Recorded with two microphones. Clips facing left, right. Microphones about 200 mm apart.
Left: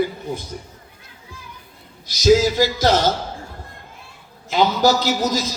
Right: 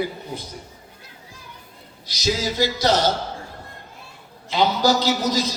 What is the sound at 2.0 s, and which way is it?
A man's voice, 50° left (ahead or behind).